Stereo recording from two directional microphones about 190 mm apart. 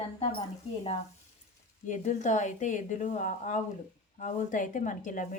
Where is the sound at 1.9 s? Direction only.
40° left (ahead or behind).